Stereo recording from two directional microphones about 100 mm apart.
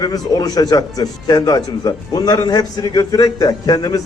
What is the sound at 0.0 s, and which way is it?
A man's voice, 40° left (ahead or behind).